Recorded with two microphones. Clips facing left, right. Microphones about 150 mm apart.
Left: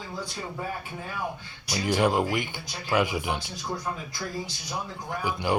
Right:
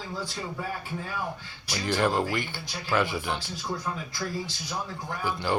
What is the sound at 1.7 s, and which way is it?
Speech, 15° left (ahead or behind).